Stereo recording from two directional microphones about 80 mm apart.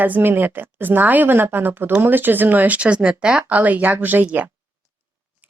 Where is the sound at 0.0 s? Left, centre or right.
Right.